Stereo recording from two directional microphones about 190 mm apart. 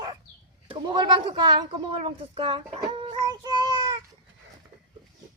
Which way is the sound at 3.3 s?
20° right (ahead or behind).